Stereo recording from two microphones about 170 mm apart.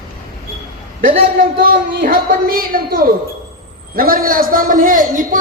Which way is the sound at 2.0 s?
60° right (ahead or behind).